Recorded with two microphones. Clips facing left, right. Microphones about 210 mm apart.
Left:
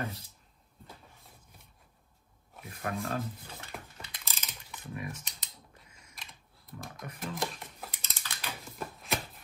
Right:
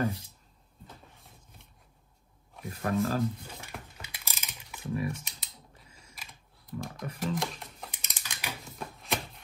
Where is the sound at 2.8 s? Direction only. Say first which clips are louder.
Right 6 dB; 35° right (ahead or behind).